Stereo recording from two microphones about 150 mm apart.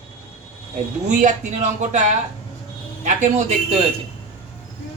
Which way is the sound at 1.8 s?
55° right (ahead or behind).